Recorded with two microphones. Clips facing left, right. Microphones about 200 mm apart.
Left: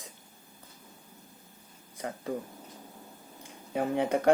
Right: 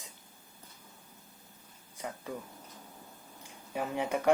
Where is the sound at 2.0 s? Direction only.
60° left (ahead or behind).